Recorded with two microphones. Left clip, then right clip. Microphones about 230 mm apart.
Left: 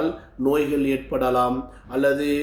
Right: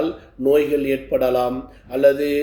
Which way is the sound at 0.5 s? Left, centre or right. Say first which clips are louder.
Right 5 dB; centre.